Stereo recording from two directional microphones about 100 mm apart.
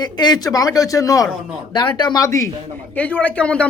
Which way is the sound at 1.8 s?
50° left (ahead or behind).